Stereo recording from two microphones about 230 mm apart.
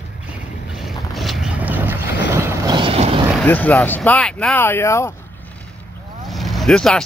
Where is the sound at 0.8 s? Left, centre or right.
Centre; by 3.3 s right.